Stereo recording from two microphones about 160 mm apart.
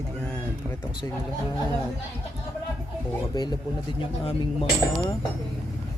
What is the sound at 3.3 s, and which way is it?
Speech, 25° left (ahead or behind).